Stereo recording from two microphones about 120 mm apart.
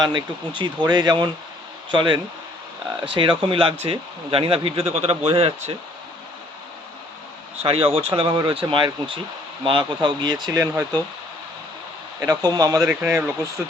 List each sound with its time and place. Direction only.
0.0 s speech: 40° right (ahead or behind)
7.6 s speech: 55° right (ahead or behind); by 11.0 s 30° right (ahead or behind)
12.2 s speech: 30° right (ahead or behind)
12.9 s speech: 20° right (ahead or behind)